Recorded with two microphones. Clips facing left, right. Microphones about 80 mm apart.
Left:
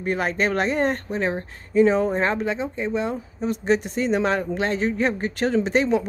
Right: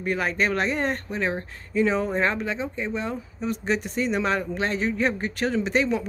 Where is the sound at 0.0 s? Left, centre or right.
Left.